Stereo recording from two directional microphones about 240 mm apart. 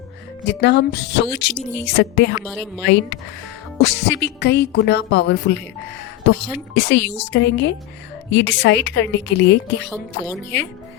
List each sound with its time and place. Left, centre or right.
0.4 s speech: left